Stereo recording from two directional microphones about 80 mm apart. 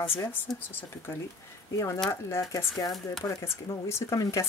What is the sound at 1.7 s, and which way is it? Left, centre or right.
Speech, left.